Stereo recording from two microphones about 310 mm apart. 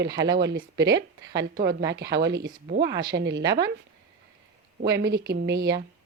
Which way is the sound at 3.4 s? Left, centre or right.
Centre.